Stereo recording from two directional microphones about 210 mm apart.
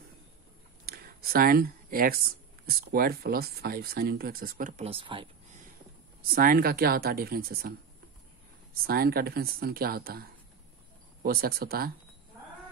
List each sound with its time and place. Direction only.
0.8 s speech: 45° right (ahead or behind); by 5.3 s 25° right (ahead or behind)
6.3 s speech: 45° right (ahead or behind)
8.8 s speech: 45° right (ahead or behind)
11.2 s speech: 45° right (ahead or behind)